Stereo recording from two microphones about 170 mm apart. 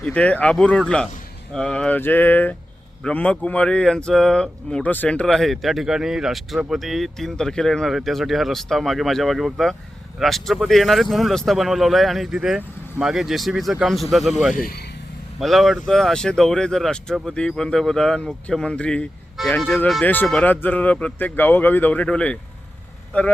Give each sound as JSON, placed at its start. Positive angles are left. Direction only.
{"t": 0.0, "sound": "speech", "side_deg": 5}
{"t": 14.5, "sound": "speech", "side_deg": 60}
{"t": 15.4, "sound": "speech", "side_deg": 0}